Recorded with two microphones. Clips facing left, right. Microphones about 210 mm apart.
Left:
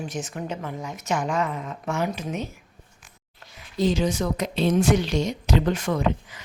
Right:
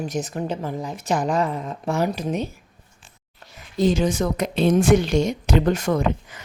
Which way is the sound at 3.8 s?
50° right (ahead or behind).